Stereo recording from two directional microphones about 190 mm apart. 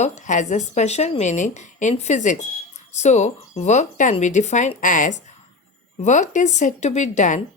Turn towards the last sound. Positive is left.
turn(degrees=40)  # may be behind; listen again after turning